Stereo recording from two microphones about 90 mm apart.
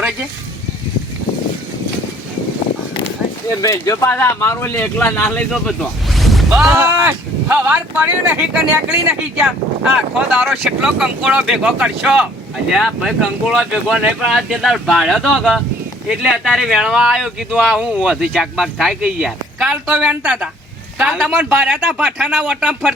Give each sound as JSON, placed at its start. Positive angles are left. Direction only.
{"t": 3.6, "sound": "speech", "side_deg": 40}
{"t": 4.0, "sound": "speech", "side_deg": 25}
{"t": 4.8, "sound": "speech", "side_deg": 20}
{"t": 5.5, "sound": "a sound", "side_deg": 5}
{"t": 6.7, "sound": "speech", "side_deg": -25}
{"t": 22.2, "sound": "speech", "side_deg": 0}